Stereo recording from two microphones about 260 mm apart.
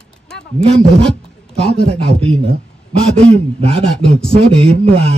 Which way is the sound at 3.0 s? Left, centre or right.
Centre.